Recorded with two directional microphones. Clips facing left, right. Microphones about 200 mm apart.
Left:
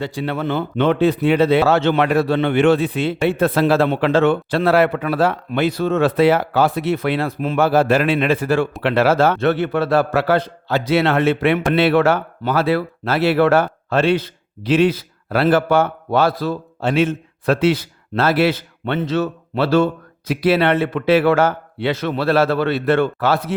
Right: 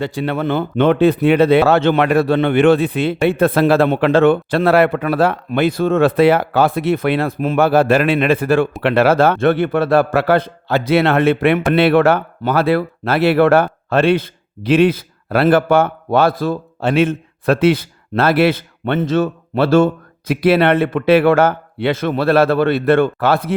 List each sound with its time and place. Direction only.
0.0 s a man's voice: 60° right (ahead or behind)